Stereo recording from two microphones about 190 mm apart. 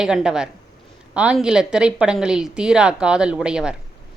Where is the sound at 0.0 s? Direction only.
5° right (ahead or behind).